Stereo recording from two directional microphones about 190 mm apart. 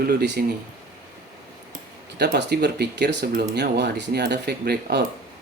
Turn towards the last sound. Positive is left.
turn(degrees=-60)  # may be behind; listen again after turning